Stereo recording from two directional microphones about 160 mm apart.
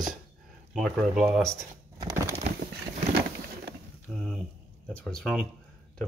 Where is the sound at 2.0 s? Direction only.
20° right (ahead or behind).